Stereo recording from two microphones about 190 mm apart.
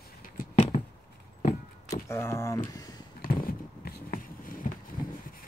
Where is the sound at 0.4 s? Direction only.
40° left (ahead or behind).